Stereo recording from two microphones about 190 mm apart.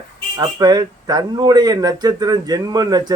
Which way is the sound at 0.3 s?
20° right (ahead or behind).